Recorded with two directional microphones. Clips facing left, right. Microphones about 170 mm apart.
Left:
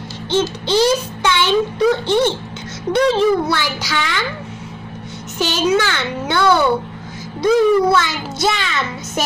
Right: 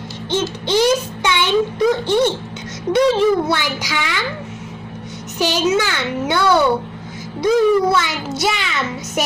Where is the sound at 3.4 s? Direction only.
15° right (ahead or behind).